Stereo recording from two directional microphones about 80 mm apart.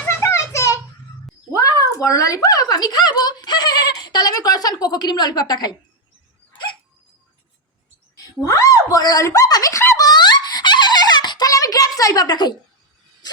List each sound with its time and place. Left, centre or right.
0.1 s children playing: left
1.5 s a woman's voice: left
8.1 s a woman's voice: left
10.0 s giggle: left
11.4 s a sound: left